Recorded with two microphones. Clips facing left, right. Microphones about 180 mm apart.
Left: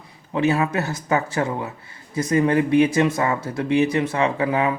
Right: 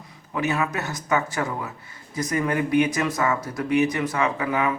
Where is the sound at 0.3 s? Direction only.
30° left (ahead or behind).